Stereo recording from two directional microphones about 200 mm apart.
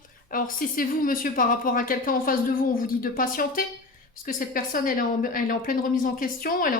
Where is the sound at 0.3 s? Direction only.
45° left (ahead or behind).